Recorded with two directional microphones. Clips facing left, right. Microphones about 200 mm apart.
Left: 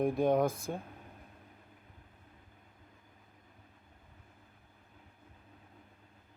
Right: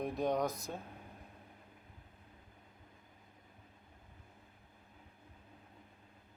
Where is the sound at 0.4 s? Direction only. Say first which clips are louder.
Left 5 dB; 25° left (ahead or behind).